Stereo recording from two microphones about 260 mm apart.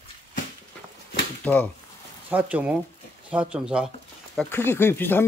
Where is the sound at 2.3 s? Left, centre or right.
Centre.